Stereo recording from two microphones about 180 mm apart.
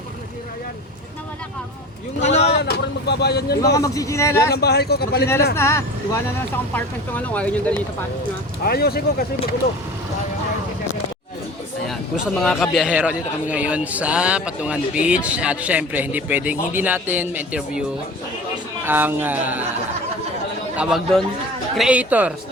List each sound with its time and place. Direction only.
2.4 s speech: 65° left (ahead or behind)
3.6 s speech: 20° left (ahead or behind)
4.5 s speech: 65° left (ahead or behind)
5.5 s speech: 15° left (ahead or behind)
8.6 s speech: 60° left (ahead or behind)
11.9 s a man's voice: centre (ahead or behind)
18.9 s a man's voice: 10° right (ahead or behind)
20.7 s a man's voice: centre (ahead or behind)